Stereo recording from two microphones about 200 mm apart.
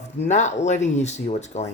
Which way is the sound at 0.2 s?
35° left (ahead or behind).